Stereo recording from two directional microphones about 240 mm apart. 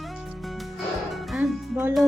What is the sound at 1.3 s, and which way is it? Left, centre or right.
Music, centre.